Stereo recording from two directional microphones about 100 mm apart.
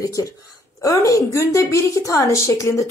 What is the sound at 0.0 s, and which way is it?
A woman's voice, 35° left (ahead or behind).